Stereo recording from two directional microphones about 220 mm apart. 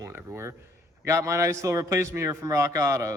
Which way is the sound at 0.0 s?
10° right (ahead or behind).